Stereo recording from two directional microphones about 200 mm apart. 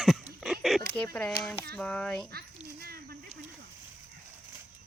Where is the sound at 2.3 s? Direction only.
50° right (ahead or behind).